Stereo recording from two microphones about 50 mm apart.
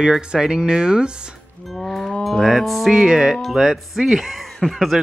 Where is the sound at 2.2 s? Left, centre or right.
Centre.